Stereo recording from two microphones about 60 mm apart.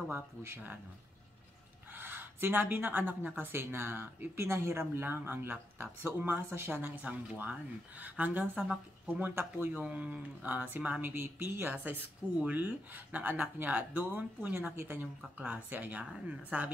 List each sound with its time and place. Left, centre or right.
0.1 s speech: right
2.0 s speech: right
9.7 s speech: right
11.0 s speech: right
15.3 s speech: right